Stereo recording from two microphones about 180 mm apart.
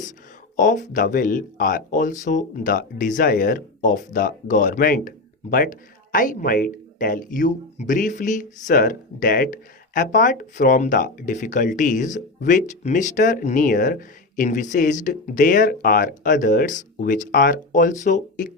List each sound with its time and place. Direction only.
0.5 s speech: 45° left (ahead or behind)